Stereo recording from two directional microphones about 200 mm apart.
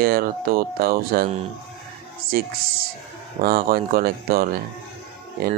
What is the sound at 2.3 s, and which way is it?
Speech, 50° right (ahead or behind).